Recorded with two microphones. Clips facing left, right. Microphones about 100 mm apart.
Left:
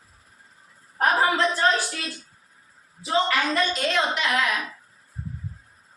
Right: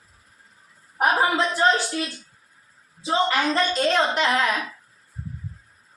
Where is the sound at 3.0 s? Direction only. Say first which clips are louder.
Right 1 dB; 25° right (ahead or behind).